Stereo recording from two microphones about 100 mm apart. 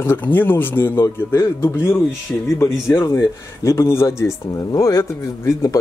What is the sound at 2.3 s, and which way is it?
Speech, 15° left (ahead or behind).